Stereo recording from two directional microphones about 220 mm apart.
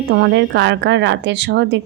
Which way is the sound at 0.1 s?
50° right (ahead or behind).